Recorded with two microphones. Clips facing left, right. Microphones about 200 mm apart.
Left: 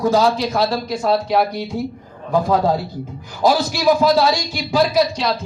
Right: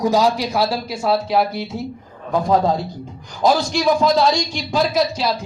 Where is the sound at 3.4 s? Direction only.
5° left (ahead or behind).